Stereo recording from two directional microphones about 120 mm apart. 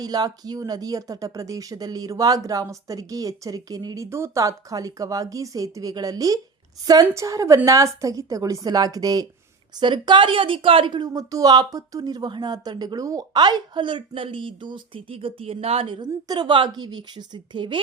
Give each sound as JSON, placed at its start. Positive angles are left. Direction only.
{"t": 0.0, "sound": "a woman's voice", "side_deg": -35}
{"t": 16.0, "sound": "a woman's voice", "side_deg": -35}